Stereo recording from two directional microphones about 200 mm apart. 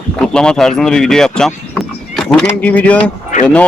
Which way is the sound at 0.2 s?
5° left (ahead or behind).